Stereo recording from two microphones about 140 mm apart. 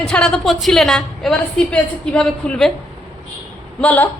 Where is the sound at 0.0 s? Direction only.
5° left (ahead or behind).